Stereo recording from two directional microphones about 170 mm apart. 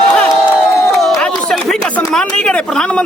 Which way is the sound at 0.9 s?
Centre (ahead or behind).